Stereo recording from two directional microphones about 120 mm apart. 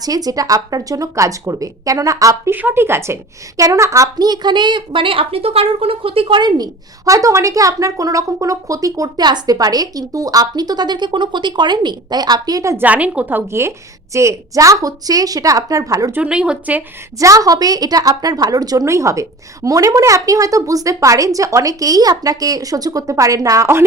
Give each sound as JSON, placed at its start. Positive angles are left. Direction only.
{"t": 0.0, "sound": "a woman's voice", "side_deg": -30}
{"t": 12.7, "sound": "a woman's voice", "side_deg": -15}
{"t": 16.1, "sound": "a woman's voice", "side_deg": -10}
{"t": 17.2, "sound": "a woman's voice", "side_deg": -30}